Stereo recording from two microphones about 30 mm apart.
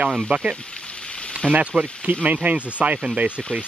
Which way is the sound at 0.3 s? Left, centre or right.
Right.